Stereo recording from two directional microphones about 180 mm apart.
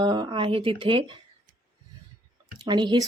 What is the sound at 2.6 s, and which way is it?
Speech, 25° right (ahead or behind).